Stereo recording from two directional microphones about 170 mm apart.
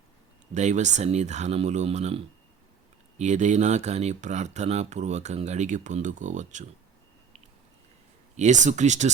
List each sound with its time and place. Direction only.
0.5 s speech: 45° right (ahead or behind)
8.4 s speech: 45° right (ahead or behind)